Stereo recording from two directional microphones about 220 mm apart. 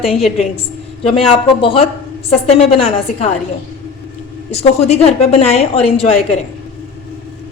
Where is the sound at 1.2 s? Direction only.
25° left (ahead or behind).